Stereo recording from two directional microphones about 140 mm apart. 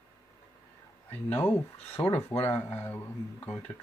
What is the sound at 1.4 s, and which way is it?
Speech, 15° left (ahead or behind).